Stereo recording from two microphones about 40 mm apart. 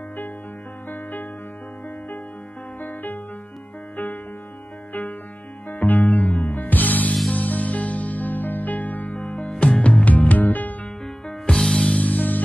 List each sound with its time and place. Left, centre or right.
0.8 s music: left
2.8 s music: left
5.7 s music: left
11.5 s music: centre
12.0 s music: left